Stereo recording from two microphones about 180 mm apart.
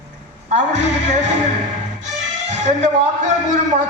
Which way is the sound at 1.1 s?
40° right (ahead or behind).